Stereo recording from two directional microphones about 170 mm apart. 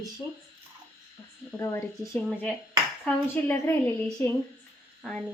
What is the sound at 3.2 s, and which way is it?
Speech, 15° left (ahead or behind).